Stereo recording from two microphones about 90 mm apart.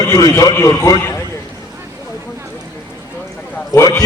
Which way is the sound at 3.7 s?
30° left (ahead or behind).